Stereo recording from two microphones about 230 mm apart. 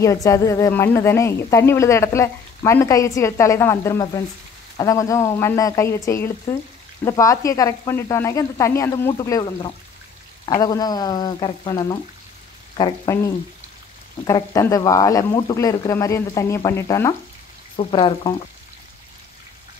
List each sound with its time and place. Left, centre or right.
0.0 s a woman's voice: centre